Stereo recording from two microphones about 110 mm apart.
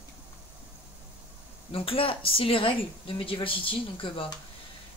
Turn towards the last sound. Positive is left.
turn(degrees=50)  # may be behind; listen again after turning